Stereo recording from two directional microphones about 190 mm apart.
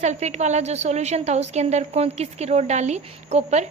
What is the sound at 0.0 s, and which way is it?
A woman's voice, 35° right (ahead or behind).